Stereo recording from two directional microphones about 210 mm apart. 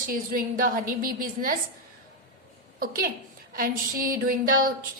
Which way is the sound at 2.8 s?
45° right (ahead or behind).